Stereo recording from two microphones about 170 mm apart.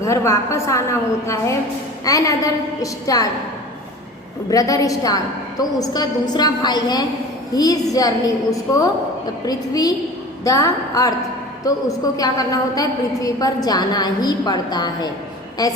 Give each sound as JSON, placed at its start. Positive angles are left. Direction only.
{"t": 0.0, "sound": "a woman's voice", "side_deg": 15}
{"t": 2.0, "sound": "a woman's voice", "side_deg": 20}
{"t": 4.4, "sound": "a woman's voice", "side_deg": 20}